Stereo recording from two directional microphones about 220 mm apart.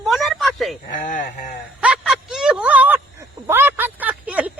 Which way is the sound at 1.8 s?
5° right (ahead or behind).